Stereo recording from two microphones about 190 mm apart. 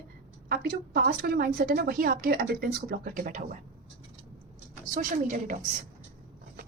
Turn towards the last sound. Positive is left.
turn(degrees=-45)  # may be behind; listen again after turning